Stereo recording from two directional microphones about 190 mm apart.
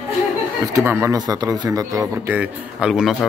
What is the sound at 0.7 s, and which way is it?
A man's voice, 15° right (ahead or behind).